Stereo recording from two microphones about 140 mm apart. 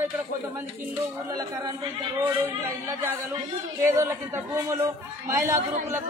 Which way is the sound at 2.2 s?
15° right (ahead or behind).